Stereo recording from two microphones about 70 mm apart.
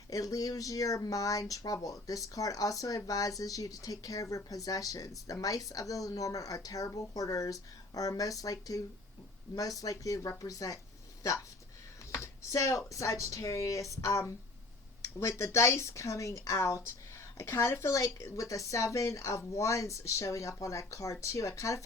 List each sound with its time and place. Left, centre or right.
0.1 s speech: left
12.1 s a woman's voice: left